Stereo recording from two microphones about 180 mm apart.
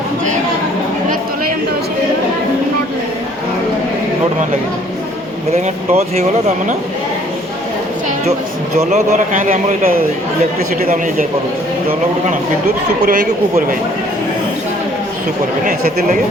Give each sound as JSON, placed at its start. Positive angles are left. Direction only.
{"t": 5.5, "sound": "speech", "side_deg": -35}
{"t": 8.8, "sound": "a man's voice", "side_deg": -40}
{"t": 10.8, "sound": "a man's voice", "side_deg": -50}